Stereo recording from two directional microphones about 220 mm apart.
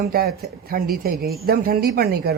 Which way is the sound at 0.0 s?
45° right (ahead or behind).